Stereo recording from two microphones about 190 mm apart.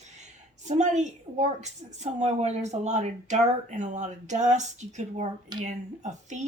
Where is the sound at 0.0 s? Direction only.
35° right (ahead or behind).